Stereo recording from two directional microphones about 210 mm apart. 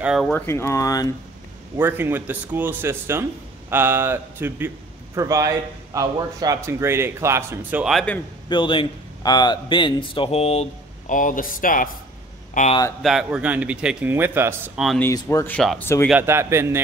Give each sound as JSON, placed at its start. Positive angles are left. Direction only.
{"t": 0.0, "sound": "a man's voice", "side_deg": -5}
{"t": 0.3, "sound": "speech", "side_deg": 10}
{"t": 1.8, "sound": "a man's voice", "side_deg": -10}
{"t": 8.5, "sound": "speech", "side_deg": 25}
{"t": 13.0, "sound": "a man's voice", "side_deg": 0}
{"t": 14.9, "sound": "speech", "side_deg": 10}
{"t": 16.1, "sound": "a man's voice", "side_deg": -10}